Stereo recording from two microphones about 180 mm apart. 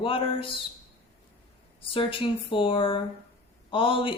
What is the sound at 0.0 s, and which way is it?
Speech, 30° left (ahead or behind).